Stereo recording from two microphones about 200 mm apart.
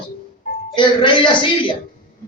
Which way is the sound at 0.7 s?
25° left (ahead or behind).